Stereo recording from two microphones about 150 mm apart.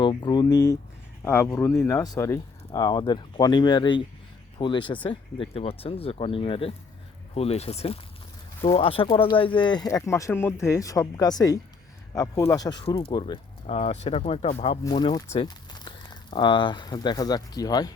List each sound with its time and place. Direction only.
0.0 s speech: 30° left (ahead or behind)
13.7 s speech: 45° left (ahead or behind)
14.8 s speech: 30° left (ahead or behind)